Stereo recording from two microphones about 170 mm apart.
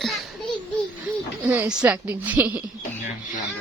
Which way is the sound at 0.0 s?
Centre (ahead or behind).